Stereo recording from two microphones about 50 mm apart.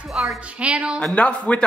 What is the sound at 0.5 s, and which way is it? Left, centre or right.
Speech, right.